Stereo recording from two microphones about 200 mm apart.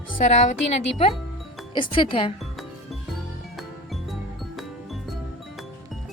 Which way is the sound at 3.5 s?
Centre (ahead or behind).